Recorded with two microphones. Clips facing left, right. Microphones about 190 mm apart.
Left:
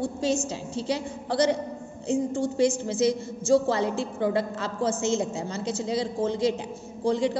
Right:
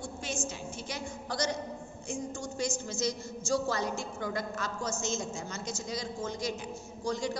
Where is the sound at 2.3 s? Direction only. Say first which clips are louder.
Left 11 dB; 30° left (ahead or behind).